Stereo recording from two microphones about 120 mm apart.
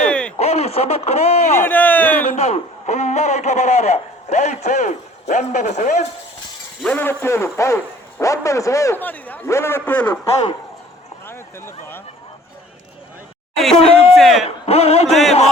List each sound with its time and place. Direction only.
0.1 s a sound: 10° left (ahead or behind)
0.3 s speech: 65° left (ahead or behind)
1.6 s a sound: 15° left (ahead or behind)
2.2 s a man's voice: 70° left (ahead or behind)
6.8 s a man's voice: 15° left (ahead or behind)
9.0 s a man's voice: 15° left (ahead or behind)
11.3 s speech: 20° left (ahead or behind)
14.2 s a man's voice: centre (ahead or behind)
14.4 s speech: 60° left (ahead or behind)
15.1 s a man's voice: centre (ahead or behind)